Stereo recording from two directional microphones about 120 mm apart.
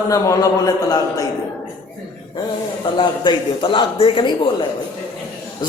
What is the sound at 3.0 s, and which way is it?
Speech, 45° left (ahead or behind).